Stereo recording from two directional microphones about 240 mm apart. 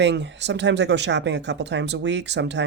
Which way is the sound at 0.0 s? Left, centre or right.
Right.